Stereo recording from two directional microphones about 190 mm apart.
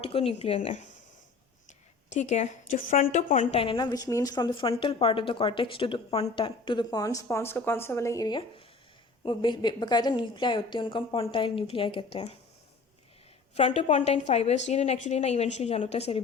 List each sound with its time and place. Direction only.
0.0 s a woman's voice: 30° left (ahead or behind)
2.0 s a woman's voice: 40° left (ahead or behind)
13.6 s a woman's voice: 35° left (ahead or behind)